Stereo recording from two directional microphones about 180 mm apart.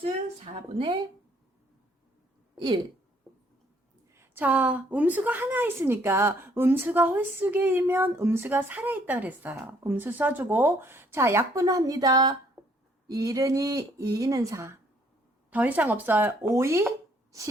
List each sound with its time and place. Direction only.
0.7 s speech: 25° right (ahead or behind)
2.6 s speech: 25° right (ahead or behind)
4.1 s a woman's voice: 10° right (ahead or behind)